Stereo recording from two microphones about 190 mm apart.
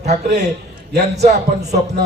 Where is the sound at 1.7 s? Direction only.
55° right (ahead or behind).